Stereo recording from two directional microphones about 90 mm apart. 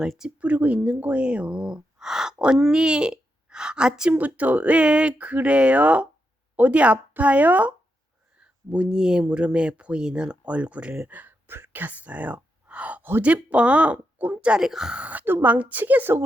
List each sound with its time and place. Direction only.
0.0 s speech: 5° right (ahead or behind)
11.2 s speech: 25° right (ahead or behind)